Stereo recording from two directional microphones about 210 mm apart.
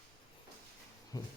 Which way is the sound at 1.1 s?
15° left (ahead or behind).